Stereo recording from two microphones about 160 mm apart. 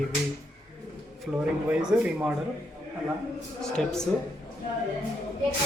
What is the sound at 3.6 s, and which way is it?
Speech, 5° left (ahead or behind).